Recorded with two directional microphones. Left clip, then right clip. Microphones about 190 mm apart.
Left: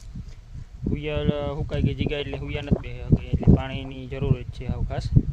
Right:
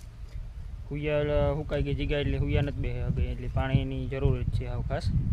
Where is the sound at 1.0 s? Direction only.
20° left (ahead or behind).